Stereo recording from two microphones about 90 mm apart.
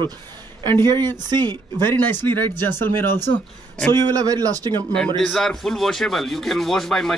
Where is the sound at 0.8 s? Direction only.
50° right (ahead or behind).